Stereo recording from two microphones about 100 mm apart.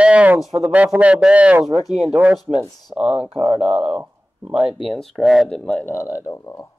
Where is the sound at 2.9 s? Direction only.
90° right.